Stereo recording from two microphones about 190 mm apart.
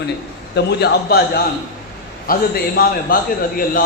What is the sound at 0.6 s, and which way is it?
A man's voice, 55° left (ahead or behind).